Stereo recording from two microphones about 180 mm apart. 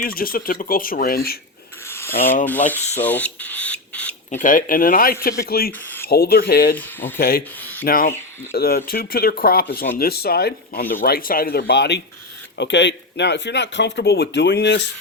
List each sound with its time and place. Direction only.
0.0 s speech: 55° left (ahead or behind)
1.9 s rub: 15° left (ahead or behind)
2.5 s speech: 10° left (ahead or behind)
4.4 s speech: 50° left (ahead or behind); by 14.8 s 75° left (ahead or behind)